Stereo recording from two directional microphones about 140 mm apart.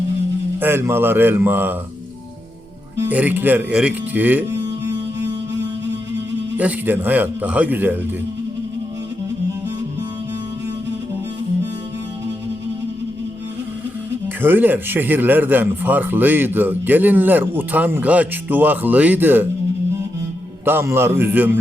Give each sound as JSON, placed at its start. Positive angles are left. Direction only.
{"t": 0.6, "sound": "a man's voice", "side_deg": -15}
{"t": 3.1, "sound": "a man's voice", "side_deg": -10}
{"t": 6.6, "sound": "a man's voice", "side_deg": -10}
{"t": 14.4, "sound": "a man's voice", "side_deg": -15}
{"t": 20.7, "sound": "a man's voice", "side_deg": -15}